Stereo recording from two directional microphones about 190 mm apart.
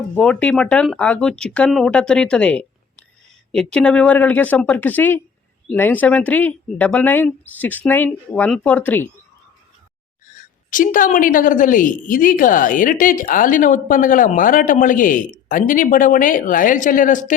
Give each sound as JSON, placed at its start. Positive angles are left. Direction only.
{"t": 0.2, "sound": "speech", "side_deg": 5}
{"t": 10.2, "sound": "a woman's voice", "side_deg": 45}